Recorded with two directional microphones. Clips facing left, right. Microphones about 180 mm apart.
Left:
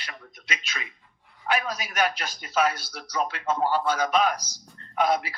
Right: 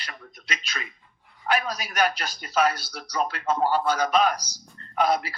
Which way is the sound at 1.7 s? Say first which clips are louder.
Right 1 dB; 35° right (ahead or behind).